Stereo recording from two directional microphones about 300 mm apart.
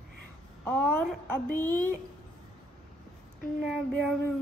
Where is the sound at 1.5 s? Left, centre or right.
Centre.